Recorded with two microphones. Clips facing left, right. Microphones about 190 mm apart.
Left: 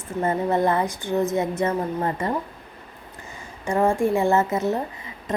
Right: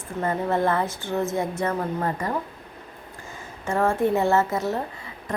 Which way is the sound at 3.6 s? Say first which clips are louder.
Left 2 dB; 15° left (ahead or behind).